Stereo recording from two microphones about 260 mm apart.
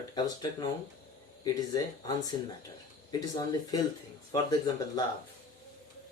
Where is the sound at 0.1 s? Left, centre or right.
Centre.